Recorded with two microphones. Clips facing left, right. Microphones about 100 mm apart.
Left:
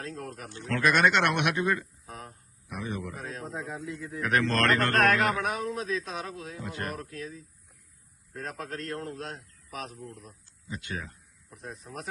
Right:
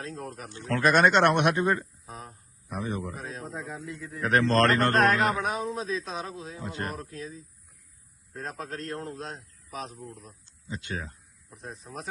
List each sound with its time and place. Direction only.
0.0 s a man's voice: 25° right (ahead or behind)
2.0 s a man's voice: 20° right (ahead or behind)
2.6 s a man's voice: 35° right (ahead or behind)
3.4 s speech: centre (ahead or behind)
4.3 s a man's voice: 30° right (ahead or behind)
9.3 s a sound: centre (ahead or behind)
9.7 s a man's voice: 30° right (ahead or behind)
10.0 s speech: centre (ahead or behind)
10.4 s speech: 25° right (ahead or behind)